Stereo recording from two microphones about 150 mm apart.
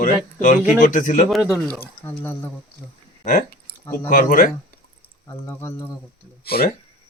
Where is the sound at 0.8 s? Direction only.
55° left (ahead or behind).